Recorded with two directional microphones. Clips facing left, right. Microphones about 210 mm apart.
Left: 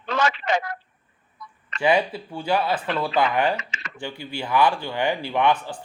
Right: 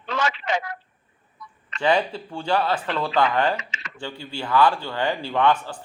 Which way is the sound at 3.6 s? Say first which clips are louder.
Left 1 dB; 45° left (ahead or behind).